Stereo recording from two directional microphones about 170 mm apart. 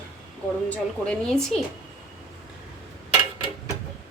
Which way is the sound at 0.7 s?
5° left (ahead or behind).